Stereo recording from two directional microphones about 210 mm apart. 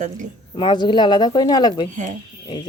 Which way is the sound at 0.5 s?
20° left (ahead or behind).